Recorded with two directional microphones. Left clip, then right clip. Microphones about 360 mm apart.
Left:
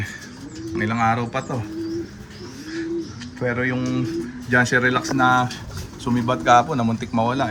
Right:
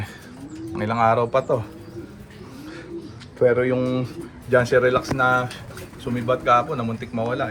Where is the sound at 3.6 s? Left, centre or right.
Centre.